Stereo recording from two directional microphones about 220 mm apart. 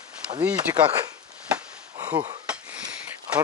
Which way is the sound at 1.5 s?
5° right (ahead or behind).